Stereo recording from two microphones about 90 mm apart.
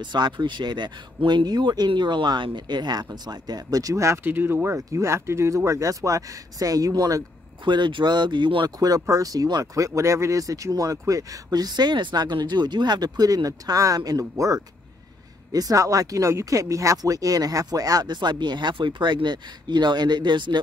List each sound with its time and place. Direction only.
0.0 s speech: 55° right (ahead or behind); by 4.2 s 35° right (ahead or behind)
4.2 s speech: 25° right (ahead or behind); by 7.2 s 45° right (ahead or behind)
7.6 s speech: 60° right (ahead or behind)
8.6 s speech: 45° right (ahead or behind)